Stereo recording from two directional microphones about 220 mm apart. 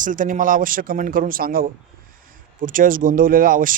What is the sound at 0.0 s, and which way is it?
Speech, 35° right (ahead or behind).